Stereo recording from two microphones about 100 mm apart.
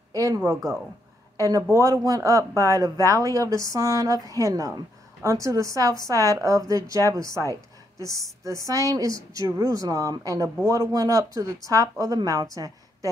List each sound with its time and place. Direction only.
0.1 s a sound: 35° right (ahead or behind)
0.5 s speech: 35° right (ahead or behind)
8.6 s a woman's voice: 35° right (ahead or behind)